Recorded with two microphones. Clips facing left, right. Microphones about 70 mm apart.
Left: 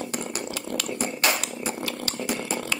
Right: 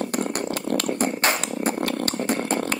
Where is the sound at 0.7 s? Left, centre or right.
Right.